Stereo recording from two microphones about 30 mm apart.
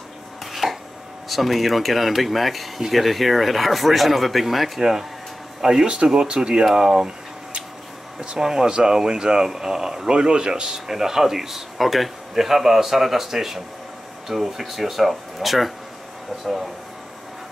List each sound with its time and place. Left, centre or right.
0.5 s chopping: centre
1.3 s speech: centre
5.9 s speech: right
8.4 s speech: centre
10.1 s speech: right; by 15.7 s centre